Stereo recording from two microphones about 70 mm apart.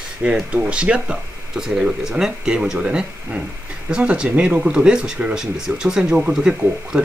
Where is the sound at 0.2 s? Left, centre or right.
Centre.